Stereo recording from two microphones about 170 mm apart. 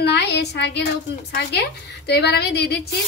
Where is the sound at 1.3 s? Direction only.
75° left (ahead or behind).